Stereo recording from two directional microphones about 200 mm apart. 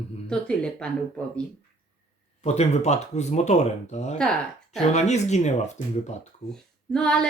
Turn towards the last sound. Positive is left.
turn(degrees=5)  # may be behind; listen again after turning